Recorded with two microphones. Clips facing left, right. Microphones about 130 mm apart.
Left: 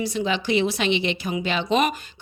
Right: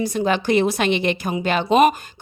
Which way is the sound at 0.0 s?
50° right (ahead or behind).